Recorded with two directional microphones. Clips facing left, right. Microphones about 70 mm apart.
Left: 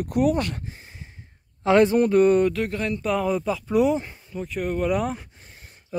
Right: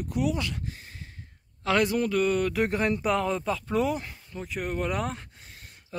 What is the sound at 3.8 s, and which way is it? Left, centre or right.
Speech, centre.